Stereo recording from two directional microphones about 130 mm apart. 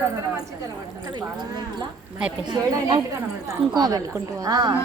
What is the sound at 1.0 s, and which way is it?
A woman's voice, 35° right (ahead or behind).